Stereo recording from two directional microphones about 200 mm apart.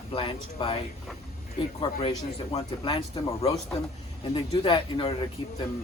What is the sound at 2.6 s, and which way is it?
Speech, 20° left (ahead or behind).